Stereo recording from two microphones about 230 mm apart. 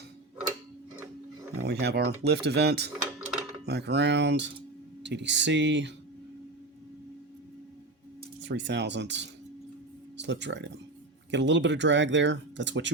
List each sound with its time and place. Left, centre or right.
1.6 s speech: right
8.4 s speech: right